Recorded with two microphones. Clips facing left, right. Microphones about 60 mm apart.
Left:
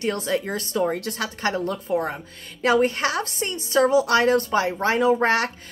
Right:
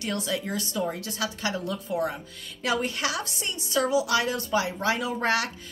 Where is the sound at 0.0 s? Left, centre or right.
Left.